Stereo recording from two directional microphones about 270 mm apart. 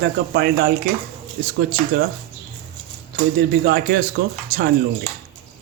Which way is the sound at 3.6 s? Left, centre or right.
Right.